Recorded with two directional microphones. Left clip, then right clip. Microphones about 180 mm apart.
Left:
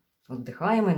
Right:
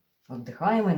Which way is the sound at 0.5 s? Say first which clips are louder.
Even; 35° left (ahead or behind).